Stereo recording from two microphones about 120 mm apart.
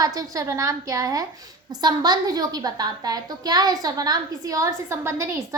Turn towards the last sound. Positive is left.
turn(degrees=-25)  # may be behind; listen again after turning